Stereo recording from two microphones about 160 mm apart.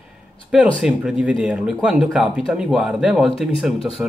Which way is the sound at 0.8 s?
5° right (ahead or behind).